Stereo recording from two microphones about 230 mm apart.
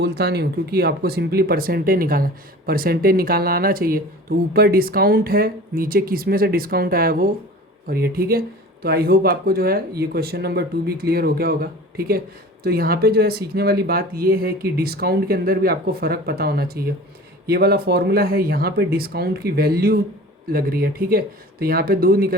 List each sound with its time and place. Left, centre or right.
0.0 s speech: right